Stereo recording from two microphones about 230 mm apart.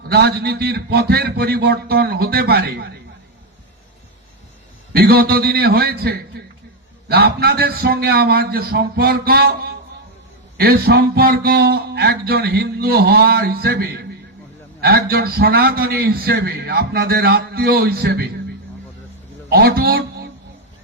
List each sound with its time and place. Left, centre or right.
0.1 s a man's voice: right
4.9 s a man's voice: right
19.5 s speech: right